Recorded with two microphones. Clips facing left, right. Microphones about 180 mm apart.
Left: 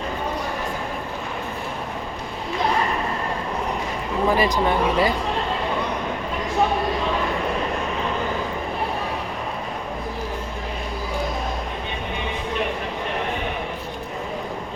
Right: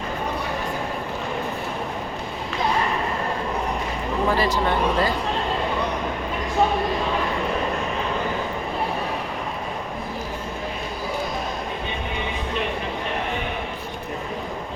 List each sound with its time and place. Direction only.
4.3 s speech: 15° left (ahead or behind)